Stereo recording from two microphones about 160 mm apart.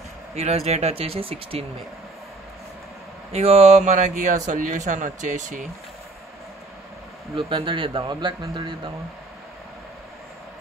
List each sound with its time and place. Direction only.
0.4 s a man's voice: 40° right (ahead or behind)
3.3 s speech: 40° right (ahead or behind)
7.3 s a man's voice: 30° right (ahead or behind)